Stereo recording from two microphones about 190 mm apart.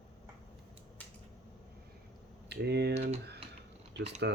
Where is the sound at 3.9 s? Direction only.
65° right (ahead or behind).